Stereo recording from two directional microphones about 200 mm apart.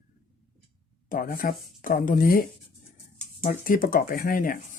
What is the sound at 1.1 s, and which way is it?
Speech, 45° left (ahead or behind).